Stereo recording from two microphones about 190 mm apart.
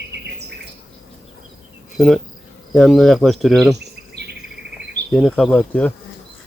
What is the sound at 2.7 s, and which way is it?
Speech, centre (ahead or behind).